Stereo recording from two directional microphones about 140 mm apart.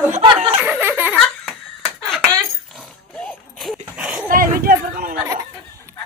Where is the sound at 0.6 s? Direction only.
10° right (ahead or behind).